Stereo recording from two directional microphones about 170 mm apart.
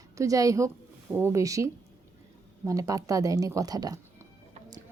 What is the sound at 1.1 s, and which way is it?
A woman's voice, 15° right (ahead or behind).